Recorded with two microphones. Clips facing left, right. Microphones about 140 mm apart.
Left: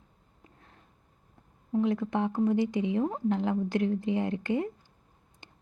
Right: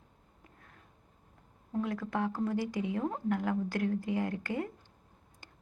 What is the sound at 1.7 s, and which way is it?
Speech, 20° left (ahead or behind).